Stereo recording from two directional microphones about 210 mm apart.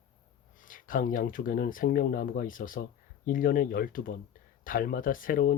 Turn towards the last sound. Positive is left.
turn(degrees=40)  # may be behind; listen again after turning